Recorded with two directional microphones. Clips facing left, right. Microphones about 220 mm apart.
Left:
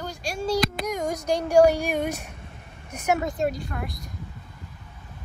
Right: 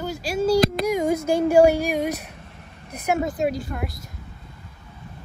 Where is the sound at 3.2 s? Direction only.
Centre (ahead or behind).